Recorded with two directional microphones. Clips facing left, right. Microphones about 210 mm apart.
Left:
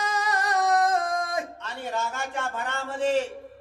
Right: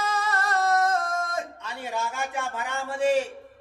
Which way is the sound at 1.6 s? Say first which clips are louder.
Left 1 dB; 10° right (ahead or behind).